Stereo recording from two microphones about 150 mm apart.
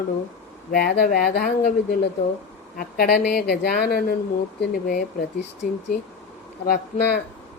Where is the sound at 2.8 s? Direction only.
90° left.